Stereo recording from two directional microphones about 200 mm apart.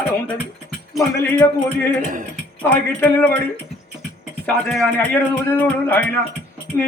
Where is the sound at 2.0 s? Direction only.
40° right (ahead or behind).